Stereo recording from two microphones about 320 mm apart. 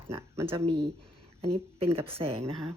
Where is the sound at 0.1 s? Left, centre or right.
Centre.